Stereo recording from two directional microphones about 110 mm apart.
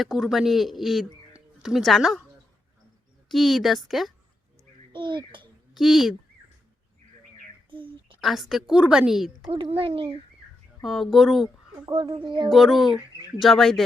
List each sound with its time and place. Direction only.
0.0 s a woman's voice: 5° right (ahead or behind)
3.2 s a woman's voice: centre (ahead or behind)
4.9 s a child's voice: 45° right (ahead or behind)
5.7 s speech: centre (ahead or behind)
7.7 s a sound: 50° right (ahead or behind)
8.2 s a woman's voice: centre (ahead or behind)
9.5 s speech: 60° right (ahead or behind)
10.8 s a woman's voice: centre (ahead or behind)
11.9 s speech: 50° right (ahead or behind)
12.5 s a woman's voice: centre (ahead or behind)